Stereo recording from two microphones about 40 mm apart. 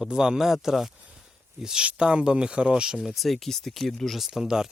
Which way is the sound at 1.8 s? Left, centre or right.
Right.